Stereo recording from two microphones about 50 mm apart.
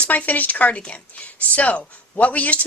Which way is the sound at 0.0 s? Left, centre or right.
Left.